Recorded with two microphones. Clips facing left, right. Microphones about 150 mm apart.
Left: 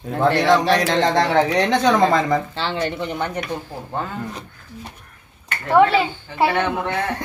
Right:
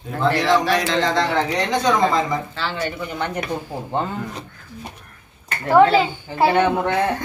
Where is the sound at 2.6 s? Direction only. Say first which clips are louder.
Left 2 dB; 30° left (ahead or behind).